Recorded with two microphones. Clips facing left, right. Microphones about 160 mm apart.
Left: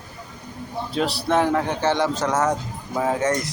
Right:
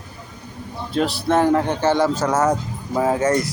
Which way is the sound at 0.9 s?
Centre (ahead or behind).